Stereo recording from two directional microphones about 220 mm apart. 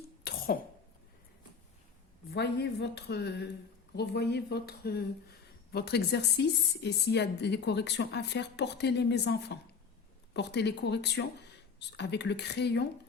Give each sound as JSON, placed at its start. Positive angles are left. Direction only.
{"t": 0.3, "sound": "cough", "side_deg": 45}
{"t": 2.3, "sound": "a woman's voice", "side_deg": 50}